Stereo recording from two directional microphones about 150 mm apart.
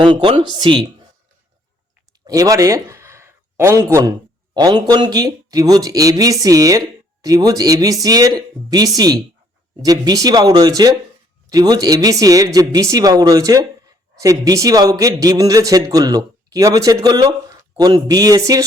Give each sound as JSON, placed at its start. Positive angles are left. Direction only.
{"t": 0.0, "sound": "a woman's voice", "side_deg": -35}
{"t": 2.2, "sound": "speech", "side_deg": -25}